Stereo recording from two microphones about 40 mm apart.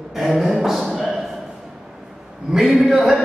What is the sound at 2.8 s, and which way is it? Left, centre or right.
Speech, centre.